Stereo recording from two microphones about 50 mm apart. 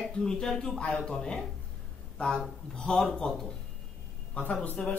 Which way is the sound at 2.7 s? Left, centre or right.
Centre.